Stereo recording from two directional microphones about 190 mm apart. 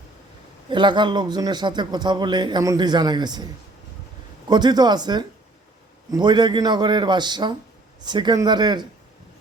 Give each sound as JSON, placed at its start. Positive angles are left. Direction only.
{"t": 0.7, "sound": "a man's voice", "side_deg": -25}